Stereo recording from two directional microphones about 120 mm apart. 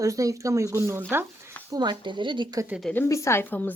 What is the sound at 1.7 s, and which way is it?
Speech, 40° right (ahead or behind).